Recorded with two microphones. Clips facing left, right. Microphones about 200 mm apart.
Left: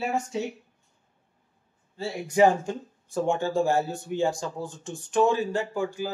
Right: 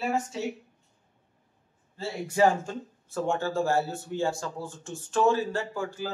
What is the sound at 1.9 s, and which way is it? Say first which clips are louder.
Speech: left 3 dB; 15° left (ahead or behind).